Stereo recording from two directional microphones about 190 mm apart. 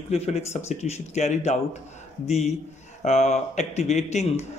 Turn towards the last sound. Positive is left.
turn(degrees=35)  # may be behind; listen again after turning